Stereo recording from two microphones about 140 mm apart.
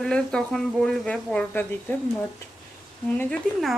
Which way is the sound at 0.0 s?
5° left (ahead or behind).